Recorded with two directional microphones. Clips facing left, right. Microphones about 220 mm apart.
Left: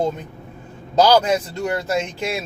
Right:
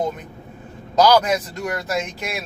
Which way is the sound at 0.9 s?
25° left (ahead or behind).